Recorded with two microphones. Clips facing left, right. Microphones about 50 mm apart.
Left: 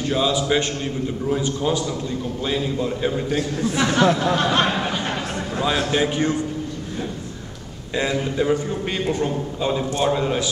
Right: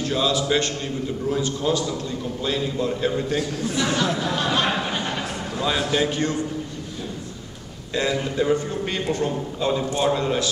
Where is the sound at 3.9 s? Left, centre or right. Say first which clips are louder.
Left 6 dB; left.